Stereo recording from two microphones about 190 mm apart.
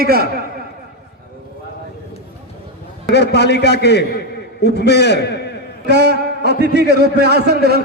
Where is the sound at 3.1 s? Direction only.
60° left (ahead or behind).